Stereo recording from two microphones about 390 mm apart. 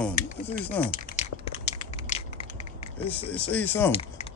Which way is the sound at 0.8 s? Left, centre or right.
Centre.